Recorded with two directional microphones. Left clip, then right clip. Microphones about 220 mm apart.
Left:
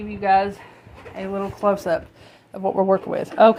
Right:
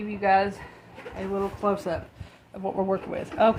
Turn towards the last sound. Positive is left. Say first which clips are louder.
# left 7 dB
turn(degrees=30)  # may be behind; listen again after turning